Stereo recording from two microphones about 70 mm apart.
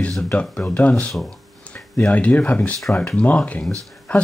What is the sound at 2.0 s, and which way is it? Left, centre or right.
Speech, left.